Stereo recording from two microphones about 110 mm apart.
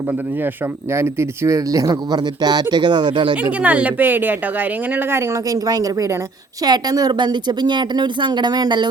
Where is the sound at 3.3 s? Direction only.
15° right (ahead or behind).